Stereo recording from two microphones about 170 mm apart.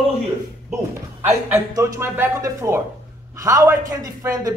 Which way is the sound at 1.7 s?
15° right (ahead or behind).